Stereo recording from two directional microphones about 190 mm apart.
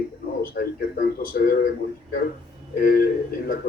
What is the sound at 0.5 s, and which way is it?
A woman's voice, 50° left (ahead or behind).